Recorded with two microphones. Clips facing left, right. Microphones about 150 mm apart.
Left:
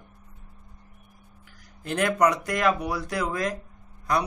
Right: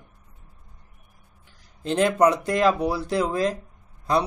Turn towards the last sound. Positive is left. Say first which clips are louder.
# right 3 dB
turn(degrees=-25)  # may be behind; listen again after turning